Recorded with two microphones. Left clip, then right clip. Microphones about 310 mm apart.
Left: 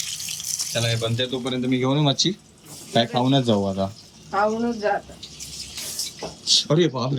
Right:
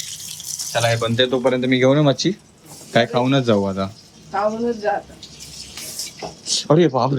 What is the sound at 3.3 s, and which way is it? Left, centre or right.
Speech, centre.